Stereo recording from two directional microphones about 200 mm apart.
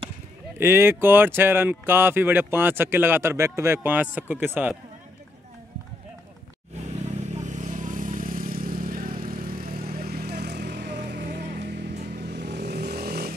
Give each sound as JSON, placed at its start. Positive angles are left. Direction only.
{"t": 0.6, "sound": "speech", "side_deg": -10}
{"t": 6.9, "sound": "vehicle", "side_deg": -35}